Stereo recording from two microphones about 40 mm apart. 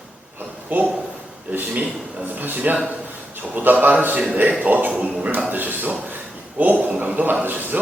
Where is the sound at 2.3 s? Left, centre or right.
Right.